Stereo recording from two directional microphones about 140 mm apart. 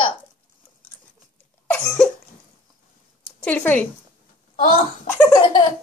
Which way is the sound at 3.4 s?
10° left (ahead or behind).